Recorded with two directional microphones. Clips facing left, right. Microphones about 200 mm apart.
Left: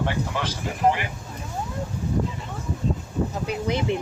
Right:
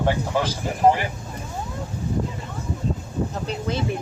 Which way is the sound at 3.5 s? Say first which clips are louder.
Left 1 dB; 15° left (ahead or behind).